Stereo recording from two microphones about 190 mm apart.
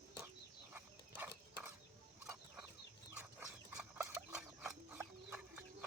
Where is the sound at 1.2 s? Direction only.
10° right (ahead or behind).